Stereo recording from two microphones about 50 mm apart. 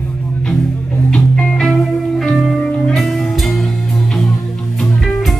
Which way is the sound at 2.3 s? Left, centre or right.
Centre.